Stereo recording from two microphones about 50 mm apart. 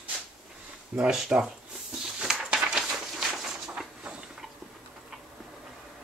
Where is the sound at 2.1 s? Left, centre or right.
Centre.